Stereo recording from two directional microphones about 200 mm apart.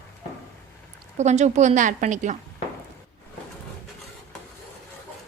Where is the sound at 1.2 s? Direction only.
35° right (ahead or behind).